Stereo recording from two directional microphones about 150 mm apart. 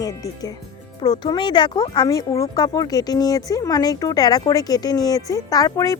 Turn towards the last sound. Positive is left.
turn(degrees=25)  # may be behind; listen again after turning